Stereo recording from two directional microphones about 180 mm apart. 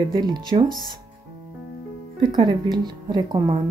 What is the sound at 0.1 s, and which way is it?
Speech, 25° right (ahead or behind).